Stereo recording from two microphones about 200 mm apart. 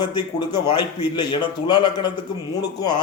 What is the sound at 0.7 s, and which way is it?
Speech, 25° left (ahead or behind).